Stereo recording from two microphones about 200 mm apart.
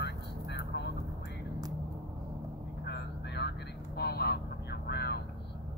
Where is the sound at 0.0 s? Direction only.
60° left (ahead or behind).